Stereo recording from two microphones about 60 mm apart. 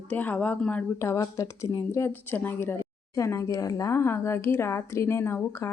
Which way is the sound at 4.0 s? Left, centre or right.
Left.